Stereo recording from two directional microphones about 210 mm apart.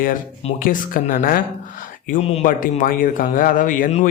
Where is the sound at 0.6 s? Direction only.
40° left (ahead or behind).